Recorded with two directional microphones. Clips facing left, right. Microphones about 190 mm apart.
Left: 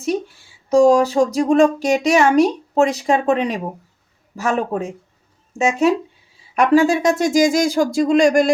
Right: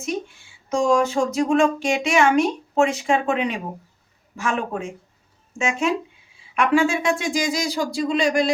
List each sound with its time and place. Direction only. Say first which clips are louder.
0.7 s speech: left 7 dB; 35° left (ahead or behind)